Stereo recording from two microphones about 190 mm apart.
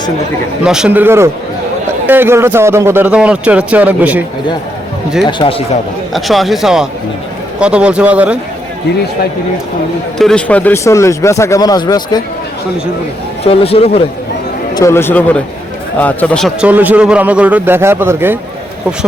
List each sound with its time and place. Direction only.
0.6 s a man's voice: 5° right (ahead or behind)
5.2 s a man's voice: 25° left (ahead or behind)
6.1 s speech: centre (ahead or behind)
10.2 s speech: 5° left (ahead or behind); by 12.2 s 20° left (ahead or behind)
13.4 s speech: 30° left (ahead or behind)
14.8 s a man's voice: 15° left (ahead or behind); by 18.3 s 10° right (ahead or behind)